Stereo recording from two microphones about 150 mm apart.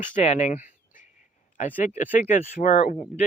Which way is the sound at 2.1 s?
60° left (ahead or behind).